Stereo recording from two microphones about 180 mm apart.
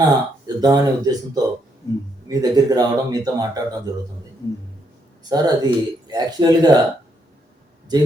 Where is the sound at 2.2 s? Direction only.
20° right (ahead or behind).